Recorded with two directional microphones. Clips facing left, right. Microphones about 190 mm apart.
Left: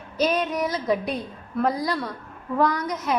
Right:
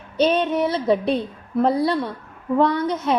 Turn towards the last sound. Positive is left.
turn(degrees=-30)  # may be behind; listen again after turning